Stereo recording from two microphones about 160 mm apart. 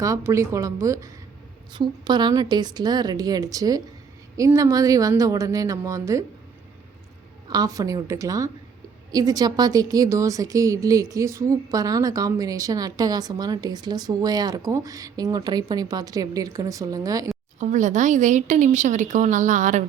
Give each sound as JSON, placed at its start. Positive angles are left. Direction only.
{"t": 0.0, "sound": "a woman's voice", "side_deg": -20}
{"t": 7.5, "sound": "a woman's voice", "side_deg": -20}
{"t": 17.6, "sound": "a woman's voice", "side_deg": -50}